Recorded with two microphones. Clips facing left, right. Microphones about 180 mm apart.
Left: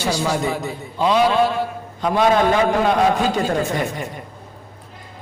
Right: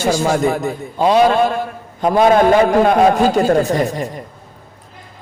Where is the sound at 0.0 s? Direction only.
45° right (ahead or behind).